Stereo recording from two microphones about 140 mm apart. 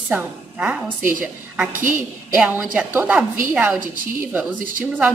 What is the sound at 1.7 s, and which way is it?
Speech, 70° right (ahead or behind).